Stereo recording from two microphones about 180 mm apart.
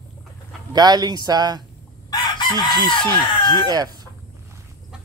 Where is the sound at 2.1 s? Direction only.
25° left (ahead or behind).